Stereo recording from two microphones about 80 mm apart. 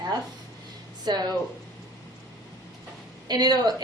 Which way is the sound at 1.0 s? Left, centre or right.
Right.